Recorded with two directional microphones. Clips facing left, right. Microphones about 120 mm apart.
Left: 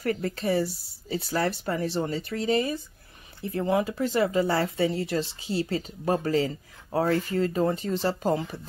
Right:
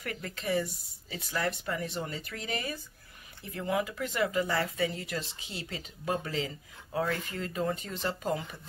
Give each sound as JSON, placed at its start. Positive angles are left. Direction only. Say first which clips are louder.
{"t": 0.0, "sound": "speech", "louder": "left 10 dB", "side_deg": 35}